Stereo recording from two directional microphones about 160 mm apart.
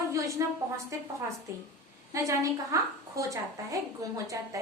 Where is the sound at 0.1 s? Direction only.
20° right (ahead or behind).